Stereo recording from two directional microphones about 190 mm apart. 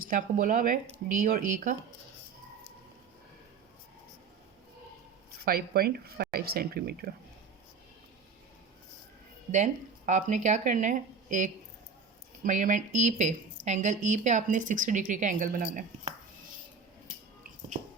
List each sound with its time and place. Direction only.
0.0 s speech: 45° right (ahead or behind)
5.5 s speech: 55° right (ahead or behind)
10.1 s a woman's voice: 40° right (ahead or behind)